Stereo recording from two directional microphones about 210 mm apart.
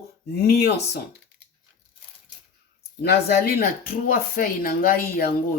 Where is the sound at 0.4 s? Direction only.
50° left (ahead or behind).